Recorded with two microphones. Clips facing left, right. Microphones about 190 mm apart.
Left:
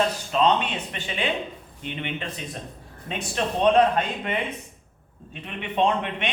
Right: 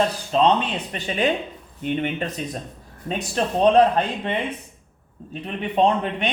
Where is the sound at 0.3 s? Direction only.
35° right (ahead or behind).